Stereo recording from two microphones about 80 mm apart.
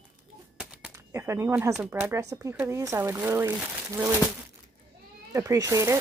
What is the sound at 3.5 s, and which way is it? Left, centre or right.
Speech, right.